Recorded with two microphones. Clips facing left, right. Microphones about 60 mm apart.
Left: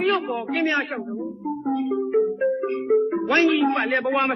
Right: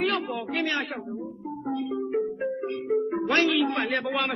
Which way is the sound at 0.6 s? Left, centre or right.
Left.